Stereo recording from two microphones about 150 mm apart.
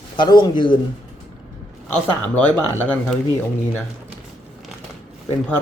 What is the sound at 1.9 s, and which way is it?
Speech, 10° left (ahead or behind).